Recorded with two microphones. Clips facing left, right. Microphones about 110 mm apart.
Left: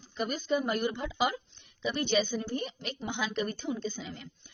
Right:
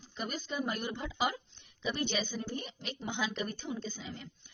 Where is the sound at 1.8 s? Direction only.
70° left (ahead or behind).